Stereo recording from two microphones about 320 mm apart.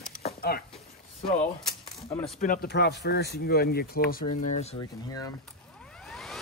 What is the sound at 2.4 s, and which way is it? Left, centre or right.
Speech, left.